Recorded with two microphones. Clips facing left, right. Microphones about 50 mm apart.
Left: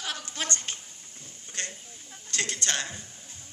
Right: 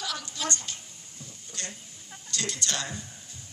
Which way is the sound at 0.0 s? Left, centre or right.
Left.